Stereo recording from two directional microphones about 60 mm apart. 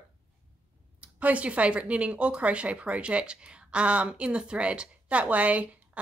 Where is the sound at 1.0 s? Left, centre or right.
Right.